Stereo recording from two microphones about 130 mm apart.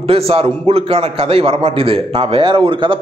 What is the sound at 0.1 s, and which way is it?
A man's voice, 45° right (ahead or behind).